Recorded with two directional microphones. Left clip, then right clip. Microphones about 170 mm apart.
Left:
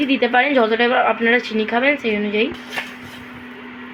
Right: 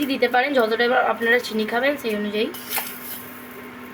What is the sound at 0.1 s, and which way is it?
Speech, 20° left (ahead or behind).